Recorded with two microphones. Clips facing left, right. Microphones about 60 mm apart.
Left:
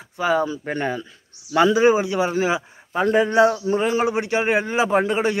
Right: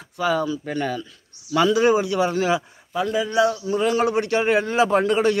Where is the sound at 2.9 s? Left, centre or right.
Left.